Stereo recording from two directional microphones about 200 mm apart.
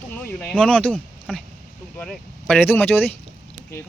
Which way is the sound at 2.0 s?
5° left (ahead or behind).